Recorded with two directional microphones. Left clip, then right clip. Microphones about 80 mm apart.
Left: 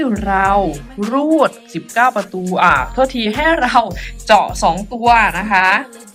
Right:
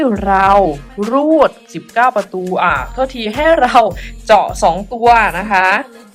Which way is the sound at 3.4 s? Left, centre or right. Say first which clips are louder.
Right 4 dB; right.